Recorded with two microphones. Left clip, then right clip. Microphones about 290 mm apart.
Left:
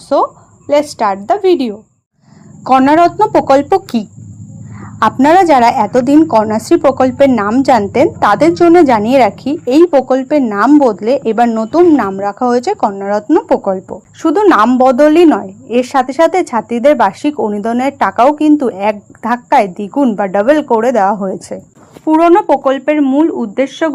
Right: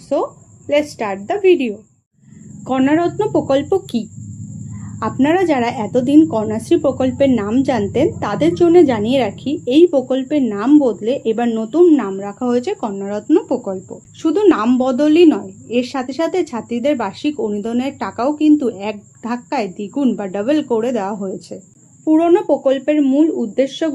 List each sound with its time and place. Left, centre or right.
0.7 s a woman's voice: left
1.4 s a woman's voice: left
2.7 s a woman's voice: left
4.9 s a woman's voice: left